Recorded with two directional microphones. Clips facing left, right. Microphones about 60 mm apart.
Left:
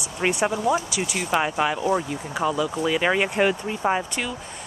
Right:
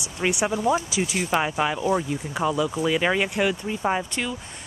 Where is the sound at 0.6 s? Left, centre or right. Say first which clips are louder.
Even; centre.